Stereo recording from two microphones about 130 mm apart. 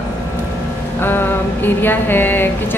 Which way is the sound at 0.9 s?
15° left (ahead or behind).